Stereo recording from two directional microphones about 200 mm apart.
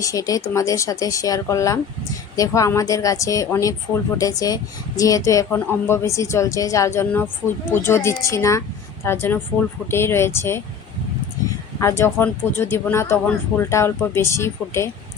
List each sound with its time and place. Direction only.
0.0 s speech: 15° left (ahead or behind)
11.8 s speech: 15° left (ahead or behind)